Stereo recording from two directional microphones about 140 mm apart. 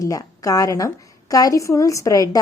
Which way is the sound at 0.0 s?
25° left (ahead or behind).